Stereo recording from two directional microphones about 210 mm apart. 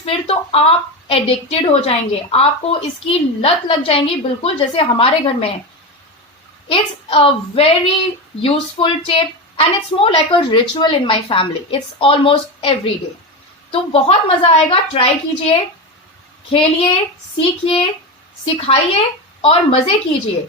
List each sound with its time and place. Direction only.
0.0 s a woman's voice: 25° left (ahead or behind)
6.7 s a woman's voice: 25° left (ahead or behind)